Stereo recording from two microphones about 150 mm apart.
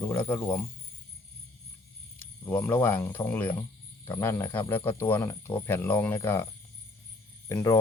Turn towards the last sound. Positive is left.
turn(degrees=20)  # may be behind; listen again after turning